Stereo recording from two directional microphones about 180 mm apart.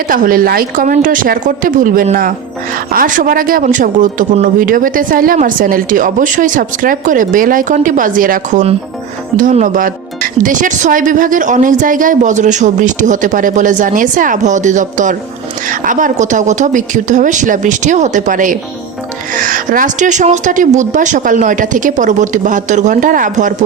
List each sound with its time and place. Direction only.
0.1 s speech: 50° right (ahead or behind)